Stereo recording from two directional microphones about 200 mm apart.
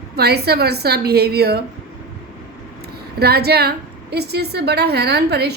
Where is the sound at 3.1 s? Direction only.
50° right (ahead or behind).